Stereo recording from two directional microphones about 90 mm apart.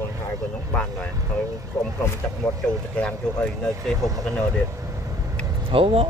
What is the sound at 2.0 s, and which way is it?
Speech, 30° left (ahead or behind).